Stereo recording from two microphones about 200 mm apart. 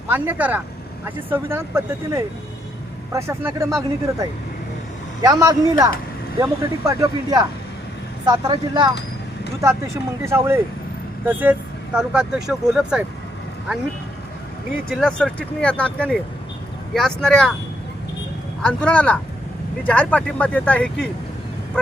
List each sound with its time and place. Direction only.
0.1 s speech: 10° right (ahead or behind)
14.8 s speech: centre (ahead or behind)
18.6 s speech: 5° left (ahead or behind)